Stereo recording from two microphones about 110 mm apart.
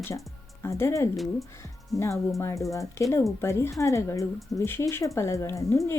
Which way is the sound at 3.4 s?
25° left (ahead or behind).